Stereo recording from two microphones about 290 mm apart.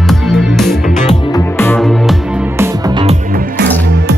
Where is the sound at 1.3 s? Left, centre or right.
Centre.